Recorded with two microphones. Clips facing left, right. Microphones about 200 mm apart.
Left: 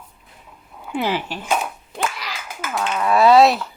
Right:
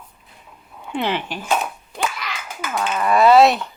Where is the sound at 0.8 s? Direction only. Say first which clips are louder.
Even; 5° left (ahead or behind).